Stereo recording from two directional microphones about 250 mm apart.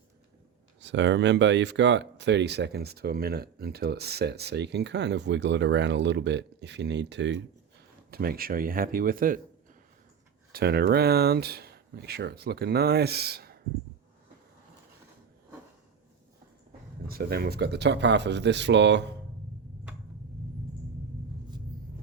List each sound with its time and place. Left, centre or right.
0.8 s speech: right
10.5 s speech: right
17.1 s speech: right